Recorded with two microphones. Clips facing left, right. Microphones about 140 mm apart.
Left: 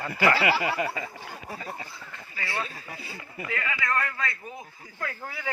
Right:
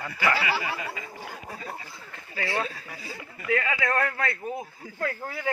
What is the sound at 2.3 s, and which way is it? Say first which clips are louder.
Speech: right 5 dB; 45° right (ahead or behind).